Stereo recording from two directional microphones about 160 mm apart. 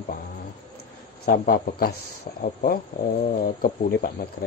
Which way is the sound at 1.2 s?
65° left (ahead or behind).